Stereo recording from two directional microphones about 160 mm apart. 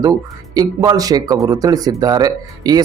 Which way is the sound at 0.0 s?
25° right (ahead or behind).